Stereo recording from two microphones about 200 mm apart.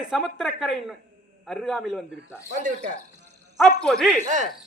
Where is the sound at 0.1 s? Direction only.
Centre (ahead or behind).